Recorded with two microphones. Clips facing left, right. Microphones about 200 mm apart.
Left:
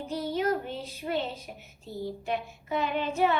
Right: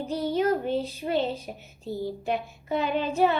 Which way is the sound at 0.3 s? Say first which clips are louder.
Right 5 dB; 30° right (ahead or behind).